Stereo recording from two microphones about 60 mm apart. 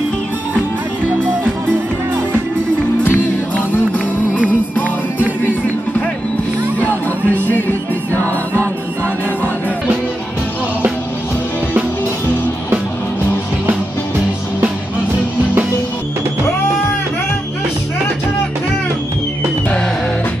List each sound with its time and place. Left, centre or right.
3.0 s music: left
5.4 s music: left